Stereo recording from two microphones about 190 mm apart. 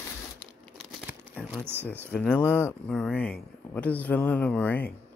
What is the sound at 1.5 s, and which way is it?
Speech, 10° right (ahead or behind).